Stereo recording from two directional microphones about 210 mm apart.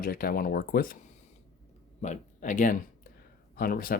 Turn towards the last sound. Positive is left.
turn(degrees=45)  # may be behind; listen again after turning